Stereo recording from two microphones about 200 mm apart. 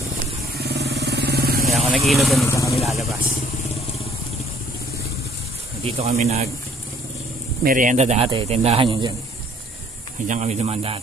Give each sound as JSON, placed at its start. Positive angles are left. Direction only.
{"t": 0.6, "sound": "vehicle", "side_deg": -55}
{"t": 1.9, "sound": "speech", "side_deg": 0}
{"t": 2.4, "sound": "speech", "side_deg": 15}
{"t": 2.8, "sound": "speech", "side_deg": 0}
{"t": 5.9, "sound": "speech", "side_deg": -35}
{"t": 7.6, "sound": "speech", "side_deg": -40}
{"t": 10.2, "sound": "speech", "side_deg": -35}